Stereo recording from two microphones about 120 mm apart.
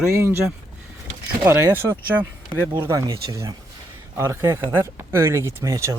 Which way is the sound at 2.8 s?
25° right (ahead or behind).